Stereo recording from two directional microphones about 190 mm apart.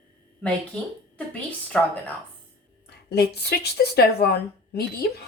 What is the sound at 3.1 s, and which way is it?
Speech, 60° left (ahead or behind).